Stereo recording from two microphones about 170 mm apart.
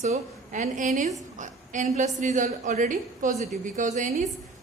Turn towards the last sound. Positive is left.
turn(degrees=-45)  # may be behind; listen again after turning